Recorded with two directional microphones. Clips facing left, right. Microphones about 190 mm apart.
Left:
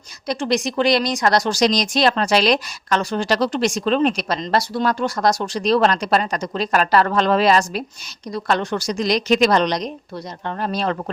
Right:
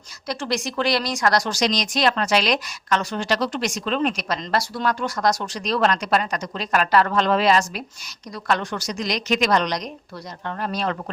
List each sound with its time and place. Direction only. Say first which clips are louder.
0.3 s speech: left 5 dB; 20° left (ahead or behind)